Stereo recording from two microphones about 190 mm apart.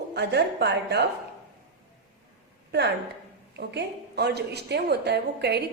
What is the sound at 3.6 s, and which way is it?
A woman's voice, 60° right (ahead or behind).